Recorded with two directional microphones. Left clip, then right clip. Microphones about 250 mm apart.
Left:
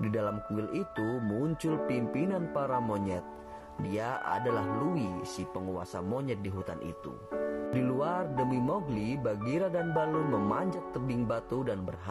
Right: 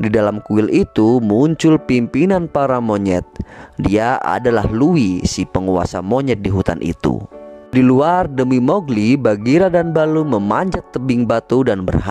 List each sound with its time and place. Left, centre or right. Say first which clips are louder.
0.0 s speech: right 17 dB; right